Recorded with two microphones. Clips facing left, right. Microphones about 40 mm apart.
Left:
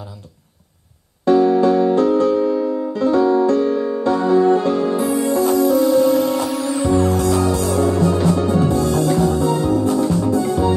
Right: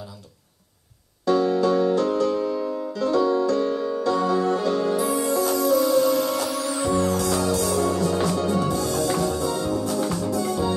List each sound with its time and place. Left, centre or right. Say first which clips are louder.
1.2 s music: left 7 dB; left
5.2 s music: left 6 dB; centre